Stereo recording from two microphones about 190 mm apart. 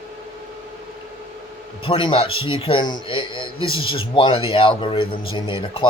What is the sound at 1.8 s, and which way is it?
Speech, 30° left (ahead or behind).